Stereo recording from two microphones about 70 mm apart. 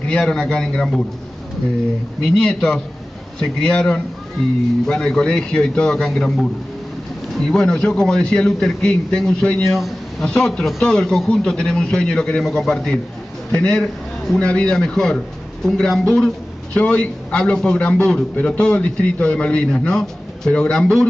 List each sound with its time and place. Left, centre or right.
0.1 s a man's voice: centre
2.2 s a man's voice: centre
9.7 s speech: centre
10.2 s a man's voice: centre
16.7 s a man's voice: left